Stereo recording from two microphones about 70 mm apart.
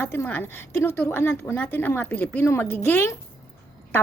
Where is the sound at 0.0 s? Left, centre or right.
Left.